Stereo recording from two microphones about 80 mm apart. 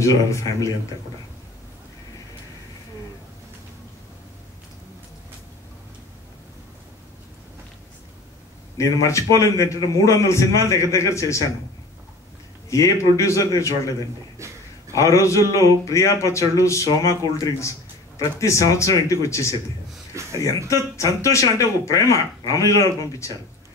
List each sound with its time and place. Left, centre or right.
0.0 s a man's voice: left
8.7 s a man's voice: left
12.6 s a man's voice: left
14.4 s speech: right
14.9 s a man's voice: left